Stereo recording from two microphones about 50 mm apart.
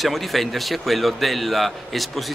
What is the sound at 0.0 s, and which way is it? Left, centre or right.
A man's voice, centre.